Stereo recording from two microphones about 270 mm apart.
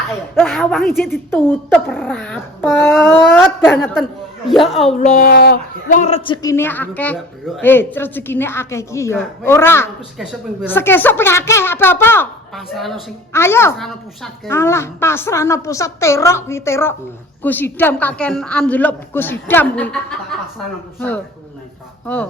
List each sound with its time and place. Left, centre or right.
0.3 s a woman's voice: centre
4.9 s a woman's voice: left; by 20.1 s centre
22.0 s speech: centre